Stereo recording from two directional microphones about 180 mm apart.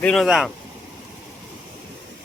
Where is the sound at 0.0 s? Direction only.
5° left (ahead or behind).